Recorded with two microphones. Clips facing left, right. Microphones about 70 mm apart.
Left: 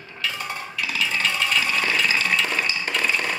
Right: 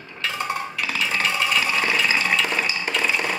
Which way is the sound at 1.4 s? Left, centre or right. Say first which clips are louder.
Right 1 dB; centre.